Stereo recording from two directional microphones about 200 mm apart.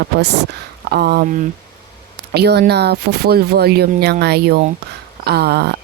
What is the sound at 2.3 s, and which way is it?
Speech, 55° right (ahead or behind).